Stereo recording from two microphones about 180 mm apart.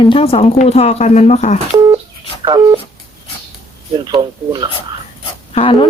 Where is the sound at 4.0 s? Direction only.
25° right (ahead or behind).